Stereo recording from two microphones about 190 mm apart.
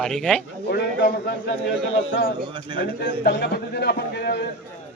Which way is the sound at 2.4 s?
25° right (ahead or behind).